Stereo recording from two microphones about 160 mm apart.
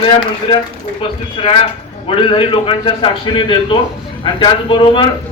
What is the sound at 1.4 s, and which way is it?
A man's voice, 35° left (ahead or behind).